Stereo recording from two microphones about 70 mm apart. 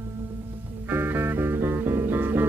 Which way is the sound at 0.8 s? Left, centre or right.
Right.